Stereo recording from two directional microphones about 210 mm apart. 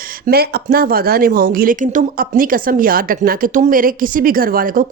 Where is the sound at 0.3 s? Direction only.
50° right (ahead or behind).